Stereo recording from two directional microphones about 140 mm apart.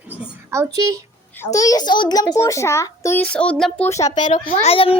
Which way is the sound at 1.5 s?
25° left (ahead or behind).